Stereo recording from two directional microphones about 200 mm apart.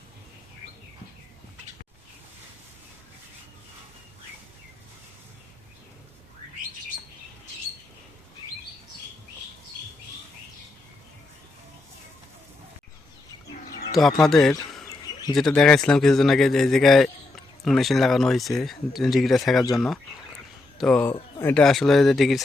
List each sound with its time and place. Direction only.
13.5 s bird: 45° left (ahead or behind)
14.2 s speech: centre (ahead or behind)
14.8 s bird: 20° left (ahead or behind)
15.4 s speech: 5° left (ahead or behind)